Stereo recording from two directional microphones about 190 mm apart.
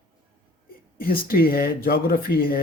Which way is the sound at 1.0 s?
50° left (ahead or behind).